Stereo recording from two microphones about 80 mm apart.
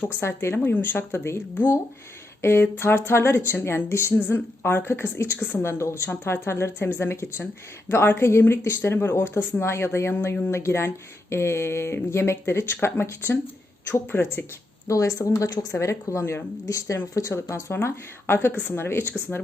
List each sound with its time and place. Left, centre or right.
0.2 s speech: left
14.8 s speech: left